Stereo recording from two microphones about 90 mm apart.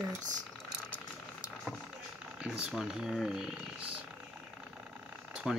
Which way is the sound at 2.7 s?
5° right (ahead or behind).